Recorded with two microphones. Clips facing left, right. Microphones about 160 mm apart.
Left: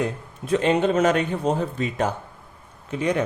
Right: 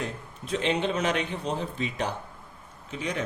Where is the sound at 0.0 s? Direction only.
55° left (ahead or behind).